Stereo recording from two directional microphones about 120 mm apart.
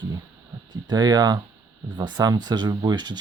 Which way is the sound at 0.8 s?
35° right (ahead or behind).